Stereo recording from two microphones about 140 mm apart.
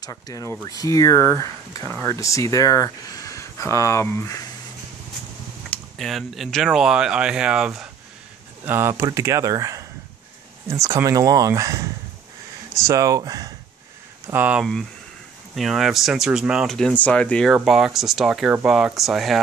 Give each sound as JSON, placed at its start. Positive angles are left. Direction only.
{"t": 0.0, "sound": "speech", "side_deg": 25}
{"t": 5.7, "sound": "speech", "side_deg": 0}
{"t": 8.6, "sound": "speech", "side_deg": -15}
{"t": 14.3, "sound": "speech", "side_deg": -10}